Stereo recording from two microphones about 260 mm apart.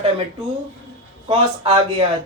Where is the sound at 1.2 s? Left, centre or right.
Right.